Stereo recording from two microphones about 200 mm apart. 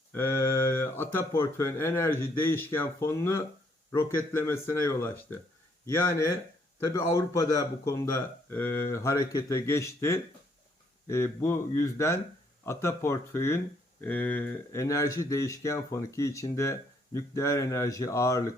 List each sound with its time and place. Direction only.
0.1 s a man's voice: 10° left (ahead or behind)